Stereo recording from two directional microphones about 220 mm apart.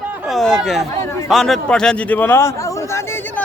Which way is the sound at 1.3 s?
Centre (ahead or behind).